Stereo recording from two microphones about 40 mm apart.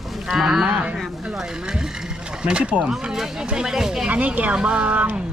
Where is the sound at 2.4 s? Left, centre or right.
Right.